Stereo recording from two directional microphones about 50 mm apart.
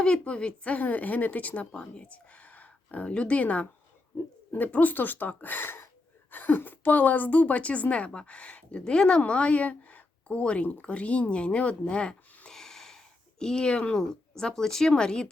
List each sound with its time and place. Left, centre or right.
0.0 s a woman's voice: centre
12.5 s a sound: centre
14.1 s speech: centre